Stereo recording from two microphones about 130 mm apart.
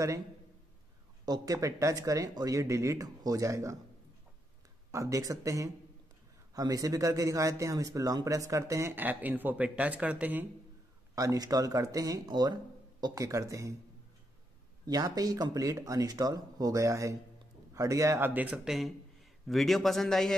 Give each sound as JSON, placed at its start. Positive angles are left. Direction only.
{"t": 1.2, "sound": "a man's voice", "side_deg": -30}
{"t": 4.9, "sound": "a man's voice", "side_deg": -25}
{"t": 11.1, "sound": "a man's voice", "side_deg": -25}
{"t": 14.9, "sound": "a man's voice", "side_deg": -30}